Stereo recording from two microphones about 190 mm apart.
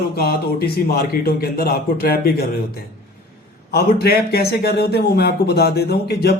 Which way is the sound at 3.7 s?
55° left (ahead or behind).